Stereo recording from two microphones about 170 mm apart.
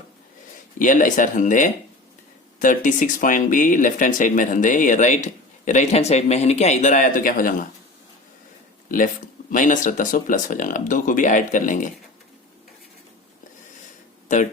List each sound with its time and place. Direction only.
0.8 s speech: 50° left (ahead or behind)
9.5 s speech: 50° left (ahead or behind)